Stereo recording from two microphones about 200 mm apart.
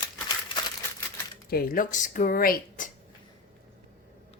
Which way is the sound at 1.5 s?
45° left (ahead or behind).